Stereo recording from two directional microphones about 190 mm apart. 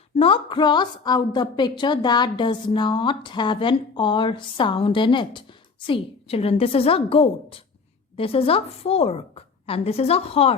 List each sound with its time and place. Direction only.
0.2 s a woman's voice: 30° left (ahead or behind)